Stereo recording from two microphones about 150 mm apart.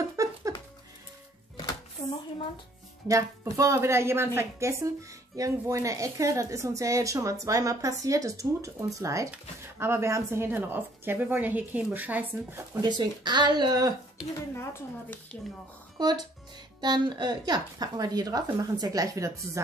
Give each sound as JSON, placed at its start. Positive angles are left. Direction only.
{"t": 0.0, "sound": "a sound", "side_deg": -20}
{"t": 3.1, "sound": "a woman's voice", "side_deg": -20}
{"t": 12.7, "sound": "a woman's voice", "side_deg": -30}
{"t": 14.5, "sound": "speech", "side_deg": 15}
{"t": 16.0, "sound": "a woman's voice", "side_deg": -25}